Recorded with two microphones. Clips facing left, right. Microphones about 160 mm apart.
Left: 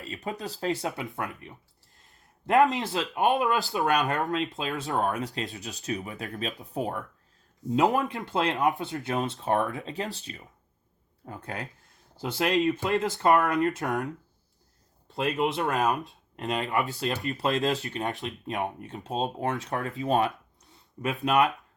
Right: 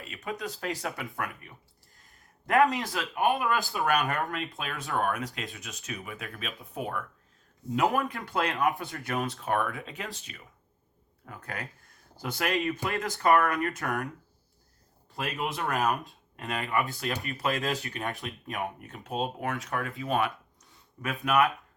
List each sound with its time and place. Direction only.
0.0 s speech: 30° left (ahead or behind)
15.1 s speech: 20° left (ahead or behind)